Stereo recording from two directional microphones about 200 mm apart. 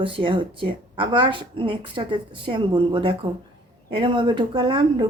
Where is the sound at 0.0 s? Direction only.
25° right (ahead or behind).